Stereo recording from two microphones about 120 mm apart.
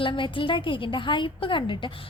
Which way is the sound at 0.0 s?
45° left (ahead or behind).